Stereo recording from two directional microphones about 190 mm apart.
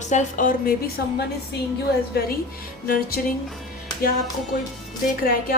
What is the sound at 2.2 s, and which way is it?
Speech, 50° left (ahead or behind).